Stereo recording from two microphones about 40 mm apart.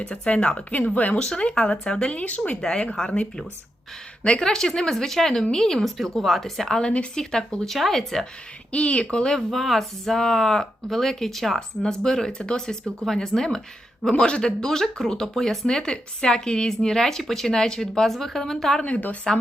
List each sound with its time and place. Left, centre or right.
0.3 s speech: left
0.9 s speech: left
1.2 s speech: left
2.1 s speech: left
3.0 s speech: centre
4.4 s speech: centre
8.7 s speech: left
9.5 s speech: centre
14.0 s speech: left
18.9 s speech: left